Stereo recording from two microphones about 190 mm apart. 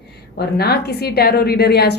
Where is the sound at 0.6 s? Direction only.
55° left (ahead or behind).